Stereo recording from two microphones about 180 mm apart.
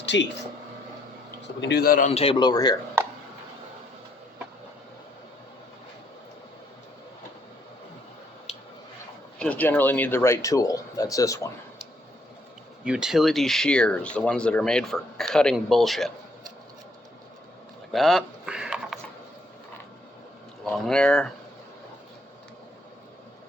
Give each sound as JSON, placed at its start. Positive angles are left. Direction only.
{"t": 0.0, "sound": "a sound", "side_deg": 85}
{"t": 1.6, "sound": "a man's voice", "side_deg": 60}
{"t": 2.0, "sound": "a man's voice", "side_deg": 35}
{"t": 9.4, "sound": "speech", "side_deg": 10}
{"t": 12.8, "sound": "speech", "side_deg": -5}
{"t": 17.9, "sound": "a sound", "side_deg": 0}
{"t": 20.7, "sound": "speech", "side_deg": 5}